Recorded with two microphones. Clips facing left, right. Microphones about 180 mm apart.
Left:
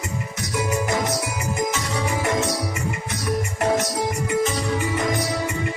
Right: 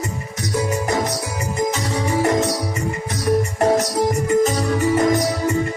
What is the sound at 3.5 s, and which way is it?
Music, 35° right (ahead or behind).